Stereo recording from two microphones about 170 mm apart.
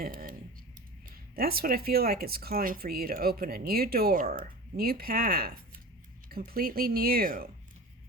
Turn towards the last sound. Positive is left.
turn(degrees=-60)  # may be behind; listen again after turning